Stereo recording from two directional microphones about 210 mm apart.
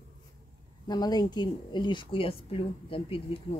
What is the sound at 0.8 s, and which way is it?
Speech, 20° left (ahead or behind).